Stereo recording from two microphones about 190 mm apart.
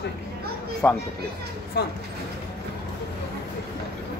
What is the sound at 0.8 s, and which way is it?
Speech, 10° left (ahead or behind).